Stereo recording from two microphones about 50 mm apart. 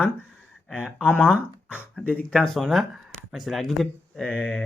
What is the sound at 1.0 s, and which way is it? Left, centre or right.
Speech, left.